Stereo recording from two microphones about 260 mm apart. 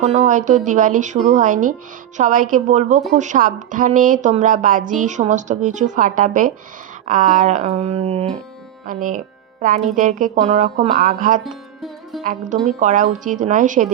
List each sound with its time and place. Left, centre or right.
0.0 s speech: right
11.4 s music: centre
12.2 s speech: right